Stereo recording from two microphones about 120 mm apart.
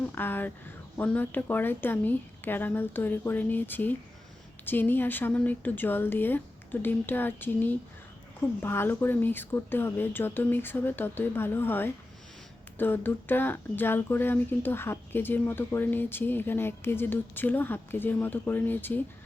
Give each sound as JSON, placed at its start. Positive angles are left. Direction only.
{"t": 0.1, "sound": "speech", "side_deg": 15}